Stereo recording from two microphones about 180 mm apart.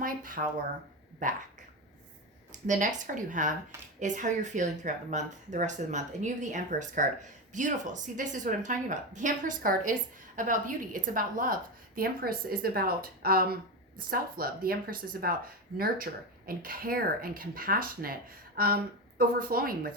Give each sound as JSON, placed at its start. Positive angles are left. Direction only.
{"t": 0.0, "sound": "a sound", "side_deg": -50}
{"t": 1.2, "sound": "speech", "side_deg": -45}
{"t": 2.5, "sound": "speech", "side_deg": -45}
{"t": 16.5, "sound": "speech", "side_deg": -55}